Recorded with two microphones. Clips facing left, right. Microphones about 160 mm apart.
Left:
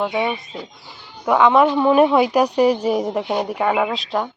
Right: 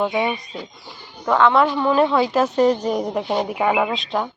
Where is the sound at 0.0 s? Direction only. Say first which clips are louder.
Even; centre (ahead or behind).